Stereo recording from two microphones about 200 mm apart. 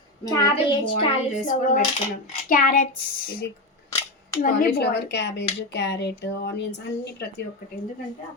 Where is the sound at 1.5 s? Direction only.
40° left (ahead or behind).